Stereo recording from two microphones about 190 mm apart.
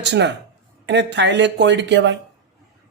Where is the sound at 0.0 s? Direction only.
65° right (ahead or behind).